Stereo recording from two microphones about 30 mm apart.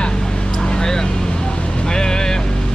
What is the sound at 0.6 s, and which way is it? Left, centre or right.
Vehicle, left.